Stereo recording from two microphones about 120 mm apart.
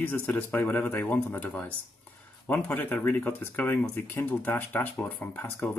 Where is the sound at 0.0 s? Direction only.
15° left (ahead or behind).